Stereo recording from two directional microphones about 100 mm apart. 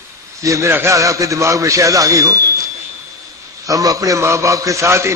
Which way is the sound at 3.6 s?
35° right (ahead or behind).